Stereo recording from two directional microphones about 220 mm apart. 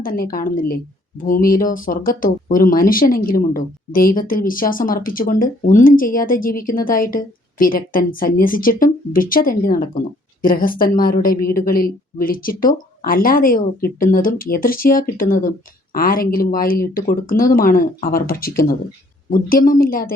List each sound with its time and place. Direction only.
0.0 s speech: 40° left (ahead or behind)